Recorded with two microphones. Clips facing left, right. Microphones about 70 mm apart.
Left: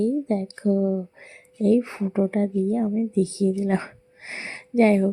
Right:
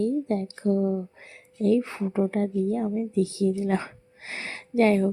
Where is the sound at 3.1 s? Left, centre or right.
Left.